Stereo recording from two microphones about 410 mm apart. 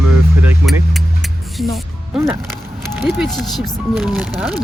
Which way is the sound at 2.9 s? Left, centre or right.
Centre.